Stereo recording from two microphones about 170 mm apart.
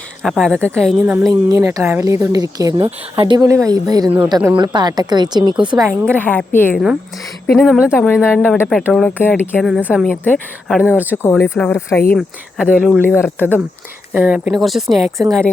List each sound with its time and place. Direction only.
0.2 s speech: centre (ahead or behind)
1.2 s speech: 20° right (ahead or behind)
6.1 s speech: 10° left (ahead or behind)
8.4 s speech: 10° left (ahead or behind)
9.6 s speech: centre (ahead or behind)
10.8 s speech: 10° right (ahead or behind)
11.2 s speech: 10° left (ahead or behind)
12.1 s speech: 5° right (ahead or behind)
13.1 s speech: 10° left (ahead or behind)
14.1 s speech: 10° right (ahead or behind)
15.2 s speech: 20° right (ahead or behind)